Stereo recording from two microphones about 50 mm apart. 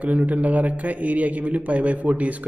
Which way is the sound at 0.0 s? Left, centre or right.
Right.